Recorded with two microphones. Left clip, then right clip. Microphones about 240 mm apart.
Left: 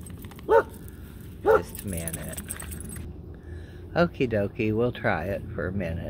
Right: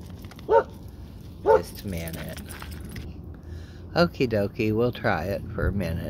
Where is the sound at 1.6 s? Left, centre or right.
Centre.